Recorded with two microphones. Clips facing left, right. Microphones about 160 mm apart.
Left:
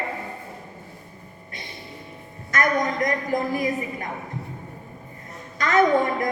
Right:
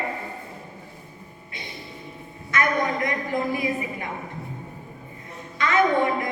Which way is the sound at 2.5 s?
40° left (ahead or behind).